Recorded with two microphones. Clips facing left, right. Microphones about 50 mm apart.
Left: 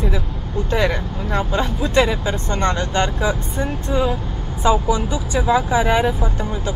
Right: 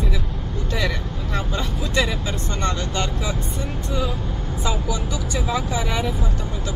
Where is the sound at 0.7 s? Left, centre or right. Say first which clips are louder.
Left 6 dB; left.